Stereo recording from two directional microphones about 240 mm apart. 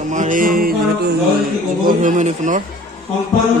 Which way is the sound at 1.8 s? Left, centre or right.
Right.